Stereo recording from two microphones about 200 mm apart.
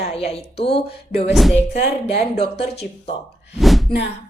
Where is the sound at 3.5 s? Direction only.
Centre (ahead or behind).